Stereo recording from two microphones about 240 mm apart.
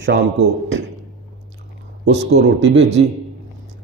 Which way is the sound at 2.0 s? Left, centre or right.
Right.